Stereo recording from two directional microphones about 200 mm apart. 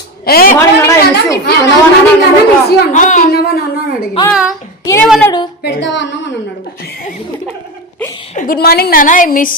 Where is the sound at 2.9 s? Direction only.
35° left (ahead or behind).